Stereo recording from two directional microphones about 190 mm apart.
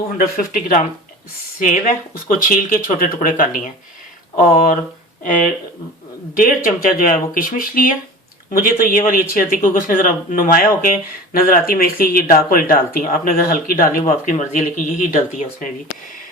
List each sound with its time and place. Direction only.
0.2 s speech: 50° left (ahead or behind)